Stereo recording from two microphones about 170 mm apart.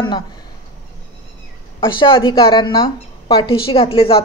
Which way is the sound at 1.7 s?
30° left (ahead or behind).